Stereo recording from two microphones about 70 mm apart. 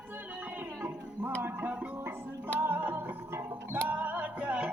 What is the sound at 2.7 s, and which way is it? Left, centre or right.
Music, right.